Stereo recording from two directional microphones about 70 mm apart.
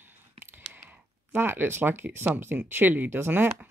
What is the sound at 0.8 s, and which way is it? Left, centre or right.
Speech, right.